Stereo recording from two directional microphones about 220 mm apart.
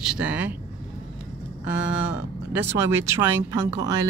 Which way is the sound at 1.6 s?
5° right (ahead or behind).